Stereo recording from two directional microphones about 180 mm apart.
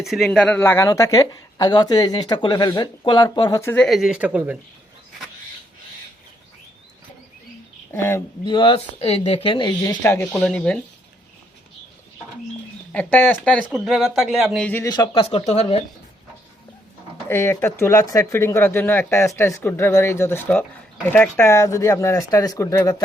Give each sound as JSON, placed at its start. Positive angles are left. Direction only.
{"t": 0.0, "sound": "speech", "side_deg": 0}
{"t": 7.9, "sound": "speech", "side_deg": 10}
{"t": 8.4, "sound": "speech", "side_deg": 25}
{"t": 12.9, "sound": "speech", "side_deg": 10}
{"t": 14.7, "sound": "speech", "side_deg": 20}
{"t": 17.2, "sound": "speech", "side_deg": 15}